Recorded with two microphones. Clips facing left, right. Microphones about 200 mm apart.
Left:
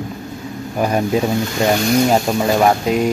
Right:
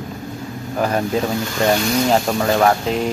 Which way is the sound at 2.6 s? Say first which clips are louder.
Left 2 dB; 10° left (ahead or behind).